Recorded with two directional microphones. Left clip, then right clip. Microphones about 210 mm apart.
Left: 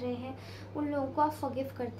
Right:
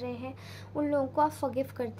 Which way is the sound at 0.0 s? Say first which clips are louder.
Even; 35° right (ahead or behind).